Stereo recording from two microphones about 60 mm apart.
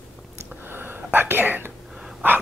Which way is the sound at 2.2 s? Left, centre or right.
Right.